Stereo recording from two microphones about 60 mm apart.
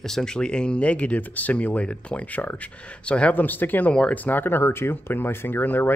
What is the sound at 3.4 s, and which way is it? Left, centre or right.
Speech, left.